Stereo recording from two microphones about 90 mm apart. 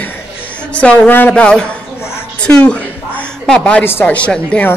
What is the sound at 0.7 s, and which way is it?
Speech, 15° left (ahead or behind).